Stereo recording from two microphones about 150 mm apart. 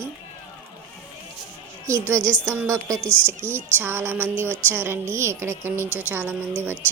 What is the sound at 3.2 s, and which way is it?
Music, 15° right (ahead or behind).